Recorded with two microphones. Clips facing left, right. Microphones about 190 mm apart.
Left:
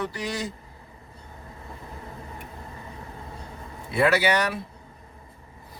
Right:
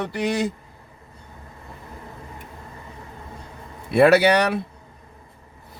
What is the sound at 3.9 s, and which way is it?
Speech, 65° right (ahead or behind).